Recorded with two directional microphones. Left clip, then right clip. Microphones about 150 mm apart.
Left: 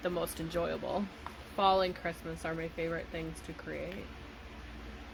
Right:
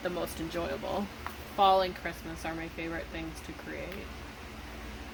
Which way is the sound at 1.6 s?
90° left.